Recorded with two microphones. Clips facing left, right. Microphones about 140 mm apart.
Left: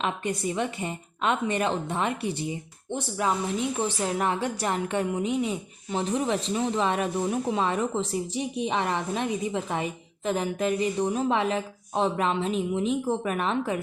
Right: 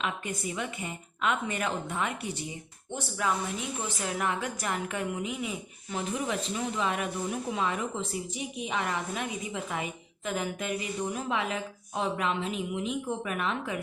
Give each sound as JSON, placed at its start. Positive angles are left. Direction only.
{"t": 0.0, "sound": "a woman's voice", "side_deg": 35}